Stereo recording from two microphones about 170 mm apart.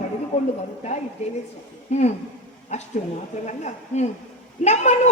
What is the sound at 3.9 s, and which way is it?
A woman's voice, 40° left (ahead or behind).